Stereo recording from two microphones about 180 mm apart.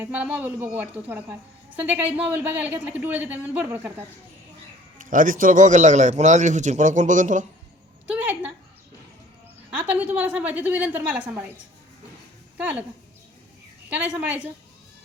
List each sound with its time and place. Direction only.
0.0 s a woman's voice: 5° right (ahead or behind)
4.9 s a man's voice: 50° right (ahead or behind)
8.0 s a sound: 10° right (ahead or behind)
9.7 s a woman's voice: 10° right (ahead or behind)
12.5 s speech: 5° right (ahead or behind)
13.9 s a woman's voice: 10° right (ahead or behind)